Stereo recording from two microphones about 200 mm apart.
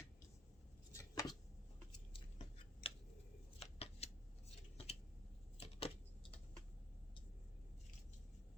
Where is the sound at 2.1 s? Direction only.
30° left (ahead or behind).